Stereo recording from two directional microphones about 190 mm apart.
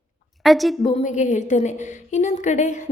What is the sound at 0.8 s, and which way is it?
A woman's voice, 40° left (ahead or behind).